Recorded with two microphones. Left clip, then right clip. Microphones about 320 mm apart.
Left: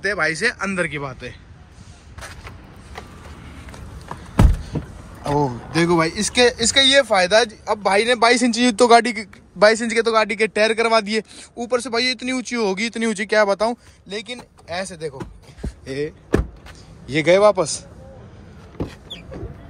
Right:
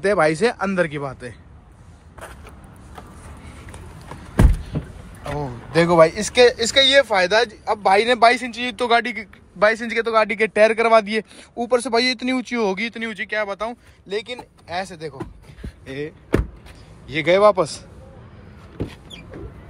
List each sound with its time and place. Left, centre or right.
0.0 s speech: centre
0.6 s speech: centre
5.2 s a man's voice: left
5.7 s speech: centre
8.5 s speech: left
14.0 s speech: centre